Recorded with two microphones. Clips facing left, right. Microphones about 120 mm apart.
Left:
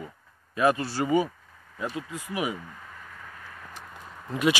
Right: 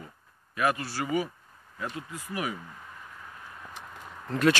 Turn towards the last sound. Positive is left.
turn(degrees=10)  # may be behind; listen again after turning